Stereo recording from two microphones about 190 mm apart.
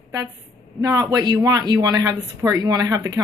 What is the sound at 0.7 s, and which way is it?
Speech, 15° right (ahead or behind).